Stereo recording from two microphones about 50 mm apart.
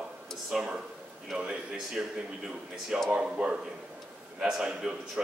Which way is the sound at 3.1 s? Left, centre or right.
Centre.